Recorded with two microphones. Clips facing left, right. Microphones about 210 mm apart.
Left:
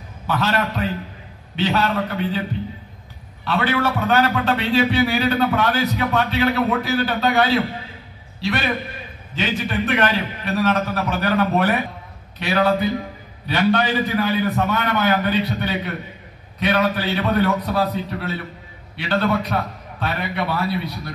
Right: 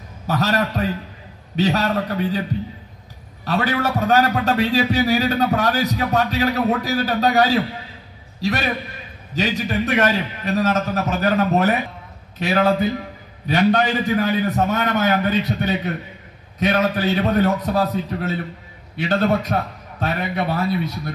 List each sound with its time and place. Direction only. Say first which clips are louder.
0.3 s a man's voice: right 1 dB; 40° right (ahead or behind)
3.4 s a man's voice: even; 40° right (ahead or behind)
12.4 s a man's voice: right 1 dB; 45° right (ahead or behind)